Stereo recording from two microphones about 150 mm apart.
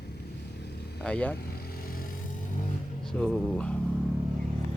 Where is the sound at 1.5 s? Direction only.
80° left.